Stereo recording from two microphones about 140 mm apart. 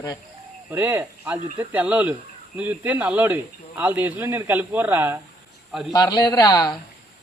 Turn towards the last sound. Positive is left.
turn(degrees=30)  # may be behind; listen again after turning